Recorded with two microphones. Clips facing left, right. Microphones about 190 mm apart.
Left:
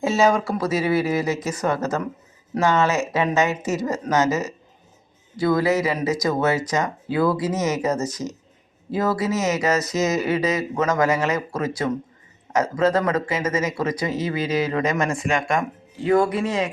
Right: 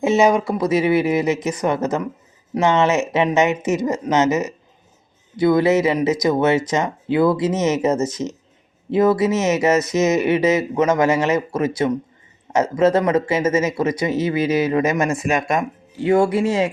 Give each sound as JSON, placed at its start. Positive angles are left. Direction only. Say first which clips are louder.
{"t": 0.0, "sound": "speech", "louder": "right 3 dB", "side_deg": -20}